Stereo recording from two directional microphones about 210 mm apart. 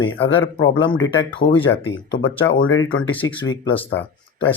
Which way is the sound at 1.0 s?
65° left (ahead or behind).